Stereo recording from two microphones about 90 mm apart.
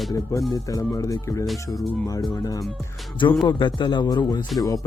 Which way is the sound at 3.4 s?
55° left (ahead or behind).